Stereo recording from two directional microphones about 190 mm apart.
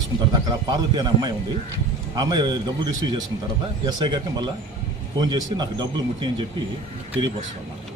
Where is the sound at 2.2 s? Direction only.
20° right (ahead or behind).